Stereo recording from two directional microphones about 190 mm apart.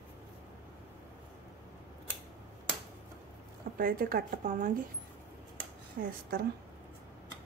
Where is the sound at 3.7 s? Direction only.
50° right (ahead or behind).